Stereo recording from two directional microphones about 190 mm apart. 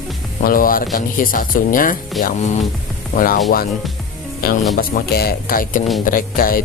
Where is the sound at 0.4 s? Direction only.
50° left (ahead or behind).